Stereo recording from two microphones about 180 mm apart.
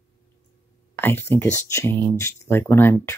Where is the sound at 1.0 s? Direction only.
10° left (ahead or behind).